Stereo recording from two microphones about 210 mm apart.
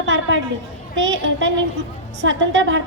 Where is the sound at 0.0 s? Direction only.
65° right (ahead or behind).